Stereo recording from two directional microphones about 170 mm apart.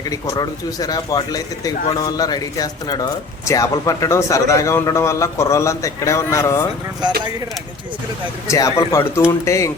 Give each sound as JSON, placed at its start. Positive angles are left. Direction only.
{"t": 0.0, "sound": "speech", "side_deg": 20}
{"t": 8.4, "sound": "speech", "side_deg": 20}